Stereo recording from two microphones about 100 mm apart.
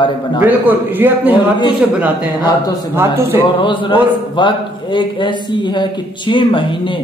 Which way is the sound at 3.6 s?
55° left (ahead or behind).